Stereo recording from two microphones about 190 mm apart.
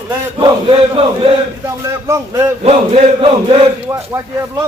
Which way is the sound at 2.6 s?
35° right (ahead or behind).